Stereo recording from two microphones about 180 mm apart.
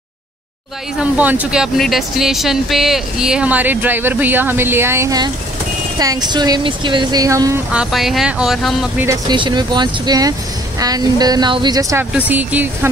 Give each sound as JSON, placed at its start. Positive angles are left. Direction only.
{"t": 0.9, "sound": "speech", "side_deg": -10}
{"t": 7.7, "sound": "speech", "side_deg": -5}
{"t": 9.0, "sound": "speech", "side_deg": -20}